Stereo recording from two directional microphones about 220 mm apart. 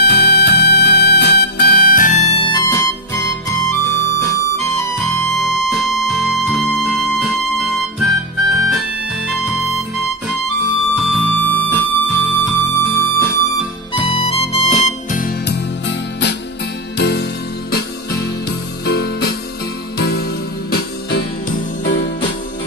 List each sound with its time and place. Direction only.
0.0 s music: 50° left (ahead or behind); by 4.8 s 15° left (ahead or behind)
5.3 s music: centre (ahead or behind)
11.1 s music: 5° left (ahead or behind)
13.9 s music: 25° left (ahead or behind); by 15.6 s 45° left (ahead or behind)
16.9 s music: 50° left (ahead or behind)
18.9 s music: 45° left (ahead or behind)